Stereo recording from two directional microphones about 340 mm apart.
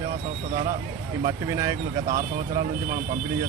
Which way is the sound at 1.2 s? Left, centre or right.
Centre.